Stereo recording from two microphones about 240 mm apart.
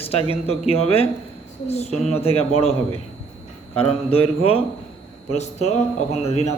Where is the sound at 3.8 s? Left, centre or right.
Left.